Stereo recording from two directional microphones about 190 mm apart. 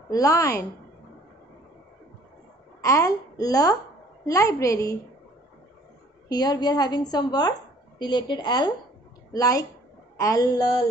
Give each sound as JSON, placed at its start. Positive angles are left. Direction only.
{"t": 0.1, "sound": "a woman's voice", "side_deg": 20}
{"t": 2.8, "sound": "a woman's voice", "side_deg": 15}
{"t": 6.2, "sound": "speech", "side_deg": 20}